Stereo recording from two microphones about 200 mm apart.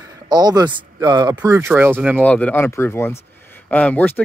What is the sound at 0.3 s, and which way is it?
Speech, 20° right (ahead or behind).